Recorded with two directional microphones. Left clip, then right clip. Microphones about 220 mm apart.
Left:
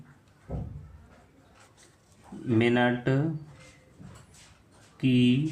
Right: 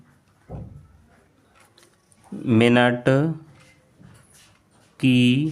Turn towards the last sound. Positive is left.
turn(degrees=-45)  # may be behind; listen again after turning